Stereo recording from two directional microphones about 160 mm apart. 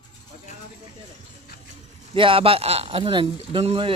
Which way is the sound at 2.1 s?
35° right (ahead or behind).